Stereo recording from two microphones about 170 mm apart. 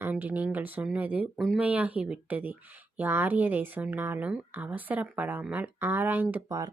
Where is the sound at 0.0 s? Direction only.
10° right (ahead or behind).